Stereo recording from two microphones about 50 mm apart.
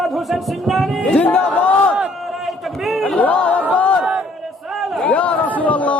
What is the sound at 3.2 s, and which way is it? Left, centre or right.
Speech, left.